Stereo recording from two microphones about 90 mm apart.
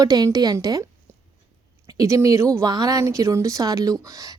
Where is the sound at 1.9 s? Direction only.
35° right (ahead or behind).